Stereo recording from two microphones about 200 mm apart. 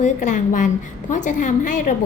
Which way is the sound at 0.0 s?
35° left (ahead or behind).